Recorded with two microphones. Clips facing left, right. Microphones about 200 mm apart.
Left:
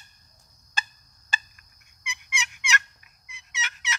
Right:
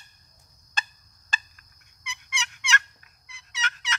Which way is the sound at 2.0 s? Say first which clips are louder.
Left 1 dB; 10° left (ahead or behind).